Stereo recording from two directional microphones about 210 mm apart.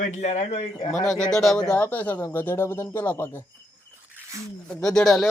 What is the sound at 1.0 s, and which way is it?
Speech, 5° left (ahead or behind).